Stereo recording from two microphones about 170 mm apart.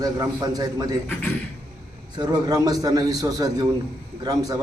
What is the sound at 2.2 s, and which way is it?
A man's voice, 25° right (ahead or behind).